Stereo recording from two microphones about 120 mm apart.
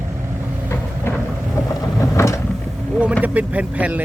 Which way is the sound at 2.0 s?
25° left (ahead or behind).